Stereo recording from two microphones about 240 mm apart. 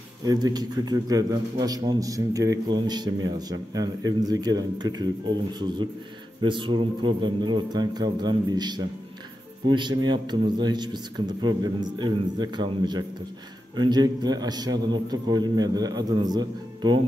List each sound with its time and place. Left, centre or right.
0.2 s a man's voice: centre